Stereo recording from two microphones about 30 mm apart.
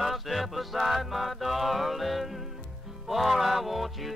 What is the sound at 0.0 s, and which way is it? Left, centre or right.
Music, centre.